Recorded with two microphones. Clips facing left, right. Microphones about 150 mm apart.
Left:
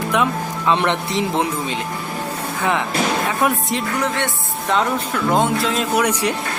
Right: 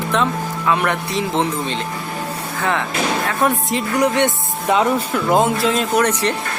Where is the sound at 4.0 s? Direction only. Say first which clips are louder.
Right 5 dB; 15° right (ahead or behind); by 6.0 s centre (ahead or behind).